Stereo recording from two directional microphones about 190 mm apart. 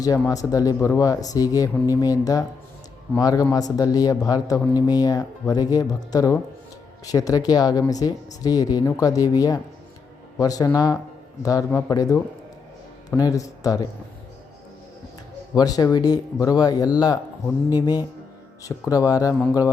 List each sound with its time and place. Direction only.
0.0 s speech: 20° left (ahead or behind)
15.5 s speech: 20° left (ahead or behind)